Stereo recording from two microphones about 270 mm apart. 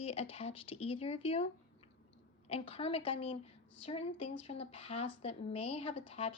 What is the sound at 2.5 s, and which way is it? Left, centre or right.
Speech, left.